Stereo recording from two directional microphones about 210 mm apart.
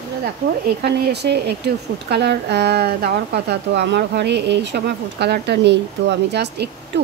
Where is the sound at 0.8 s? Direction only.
50° right (ahead or behind).